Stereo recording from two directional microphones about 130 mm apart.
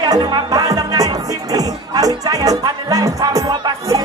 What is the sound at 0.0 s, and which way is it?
Music, 30° right (ahead or behind).